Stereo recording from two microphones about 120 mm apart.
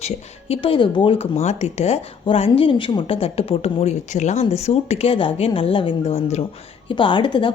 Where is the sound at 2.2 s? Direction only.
55° left (ahead or behind).